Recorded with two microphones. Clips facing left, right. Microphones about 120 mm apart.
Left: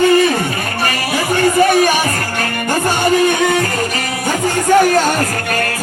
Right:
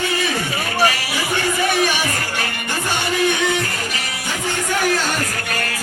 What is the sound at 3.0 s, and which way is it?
Music, 45° left (ahead or behind).